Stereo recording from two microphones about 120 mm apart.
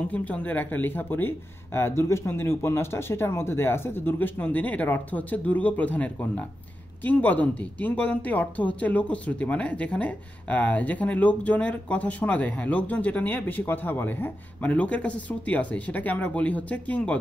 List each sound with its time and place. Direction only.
0.0 s speech: 10° left (ahead or behind)